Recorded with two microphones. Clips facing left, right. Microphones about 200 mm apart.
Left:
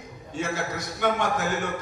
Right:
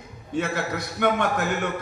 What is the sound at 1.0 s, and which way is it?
Speech, 55° right (ahead or behind).